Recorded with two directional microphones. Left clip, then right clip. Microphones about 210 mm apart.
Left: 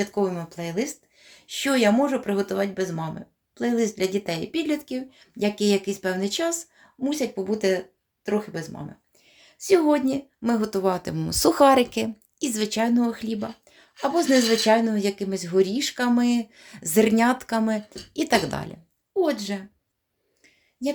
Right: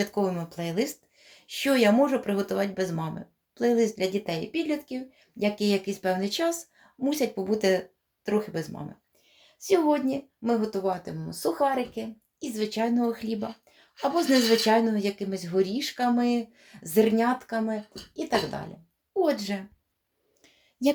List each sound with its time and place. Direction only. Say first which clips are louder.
0.0 s speech: left 2 dB; centre (ahead or behind)
9.6 s speech: left 4 dB; 20° left (ahead or behind); by 18.7 s 40° left (ahead or behind)
19.1 s speech: left 2 dB; 5° left (ahead or behind)